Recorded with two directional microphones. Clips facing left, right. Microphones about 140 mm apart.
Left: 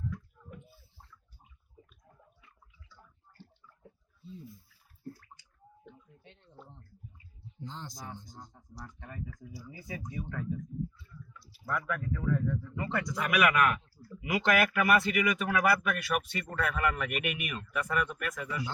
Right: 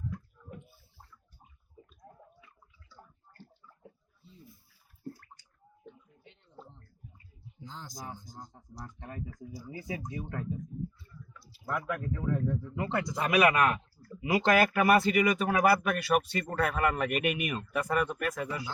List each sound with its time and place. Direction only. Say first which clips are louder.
2.9 s bathtub: right 5 dB; 45° right (ahead or behind)
5.1 s bathtub: even; 50° right (ahead or behind)
7.6 s speech: even; centre (ahead or behind)
8.5 s speech: right 2 dB; 20° right (ahead or behind)
9.3 s speech: right 3 dB; 45° right (ahead or behind)
10.3 s speech: even; 30° right (ahead or behind)
11.6 s speech: right 1 dB; 20° right (ahead or behind)